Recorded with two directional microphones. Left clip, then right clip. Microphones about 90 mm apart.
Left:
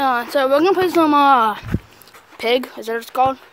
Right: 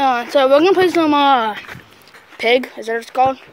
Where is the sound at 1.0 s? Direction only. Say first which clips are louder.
Left 1 dB; 35° left (ahead or behind).